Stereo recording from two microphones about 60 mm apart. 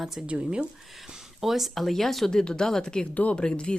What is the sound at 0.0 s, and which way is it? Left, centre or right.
Speech, centre.